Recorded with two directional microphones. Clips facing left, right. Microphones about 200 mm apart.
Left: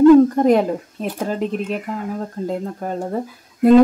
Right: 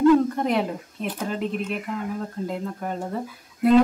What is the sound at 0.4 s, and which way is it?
A woman's voice, 45° left (ahead or behind).